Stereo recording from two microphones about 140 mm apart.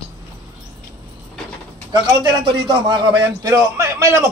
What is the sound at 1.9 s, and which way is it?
A man's voice, 30° right (ahead or behind).